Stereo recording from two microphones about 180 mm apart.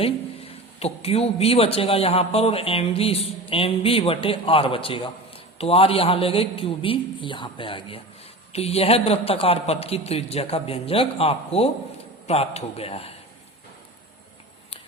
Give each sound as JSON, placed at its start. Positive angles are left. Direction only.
{"t": 0.0, "sound": "speech", "side_deg": 35}